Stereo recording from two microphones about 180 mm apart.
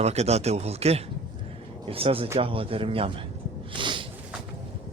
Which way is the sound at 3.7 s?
25° right (ahead or behind).